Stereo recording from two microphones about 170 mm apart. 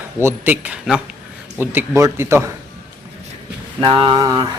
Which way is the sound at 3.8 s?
30° right (ahead or behind).